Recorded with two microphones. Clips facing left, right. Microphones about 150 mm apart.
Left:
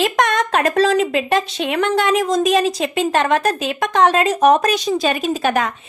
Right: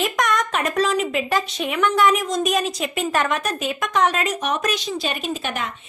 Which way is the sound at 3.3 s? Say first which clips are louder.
Left 6 dB; 90° left.